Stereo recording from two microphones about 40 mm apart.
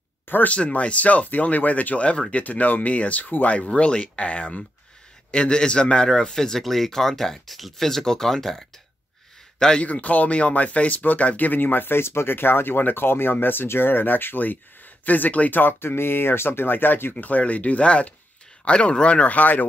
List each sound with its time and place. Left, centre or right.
0.5 s speech: left
3.5 s speech: left; by 8.6 s centre
9.8 s speech: left
15.6 s speech: left
17.2 s speech: left